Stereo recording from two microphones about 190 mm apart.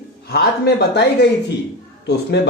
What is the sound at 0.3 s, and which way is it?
Speech, 55° left (ahead or behind).